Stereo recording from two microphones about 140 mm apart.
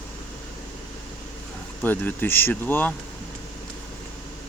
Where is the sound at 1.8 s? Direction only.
15° left (ahead or behind).